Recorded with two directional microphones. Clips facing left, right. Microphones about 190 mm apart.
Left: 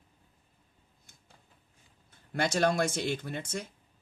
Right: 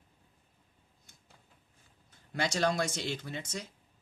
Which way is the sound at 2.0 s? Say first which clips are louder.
Left 3 dB; 55° left (ahead or behind).